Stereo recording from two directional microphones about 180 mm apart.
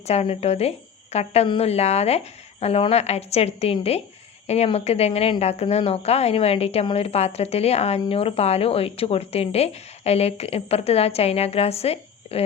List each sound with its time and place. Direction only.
0.0 s speech: 35° left (ahead or behind)